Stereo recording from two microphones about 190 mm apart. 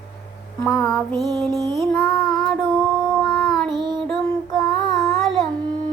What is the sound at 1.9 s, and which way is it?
Child singing, 5° left (ahead or behind).